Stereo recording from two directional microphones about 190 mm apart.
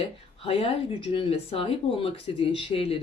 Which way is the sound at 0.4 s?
30° left (ahead or behind).